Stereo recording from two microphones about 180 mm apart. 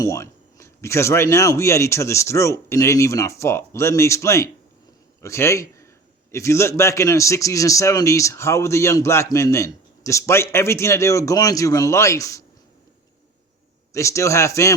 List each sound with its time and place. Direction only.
0.0 s a man's voice: 15° left (ahead or behind)
13.9 s a man's voice: 15° left (ahead or behind)